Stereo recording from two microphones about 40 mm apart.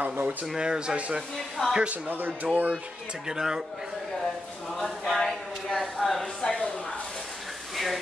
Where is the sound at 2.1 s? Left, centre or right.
Right.